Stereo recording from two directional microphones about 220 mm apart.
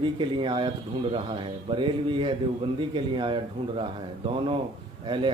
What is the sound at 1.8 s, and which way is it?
Speech, 20° right (ahead or behind).